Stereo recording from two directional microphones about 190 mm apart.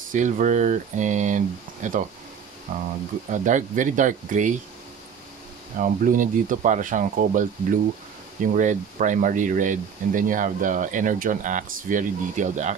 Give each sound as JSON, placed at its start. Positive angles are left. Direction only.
{"t": 0.1, "sound": "speech", "side_deg": -40}
{"t": 3.3, "sound": "speech", "side_deg": -40}
{"t": 5.8, "sound": "speech", "side_deg": -45}